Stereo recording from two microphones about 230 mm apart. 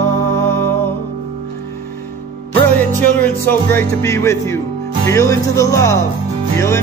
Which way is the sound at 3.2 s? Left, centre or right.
Centre.